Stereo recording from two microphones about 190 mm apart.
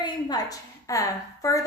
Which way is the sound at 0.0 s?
20° left (ahead or behind).